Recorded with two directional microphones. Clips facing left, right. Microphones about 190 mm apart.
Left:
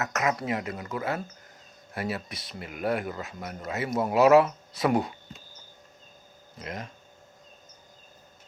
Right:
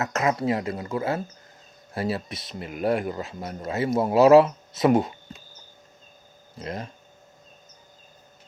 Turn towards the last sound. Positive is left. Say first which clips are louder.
# right 4 dB
turn(degrees=-30)  # may be behind; listen again after turning